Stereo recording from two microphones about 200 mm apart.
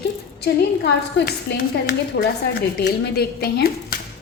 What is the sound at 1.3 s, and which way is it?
A woman's voice, 50° left (ahead or behind).